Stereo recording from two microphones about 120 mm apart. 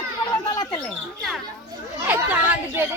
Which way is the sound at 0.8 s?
5° left (ahead or behind).